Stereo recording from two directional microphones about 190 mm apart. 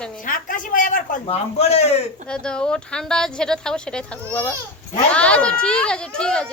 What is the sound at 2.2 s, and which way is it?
Speech, 5° left (ahead or behind).